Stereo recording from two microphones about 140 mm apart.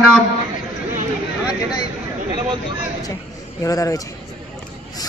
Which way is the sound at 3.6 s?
25° left (ahead or behind).